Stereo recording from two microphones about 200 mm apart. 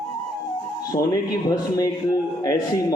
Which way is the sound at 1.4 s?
20° left (ahead or behind).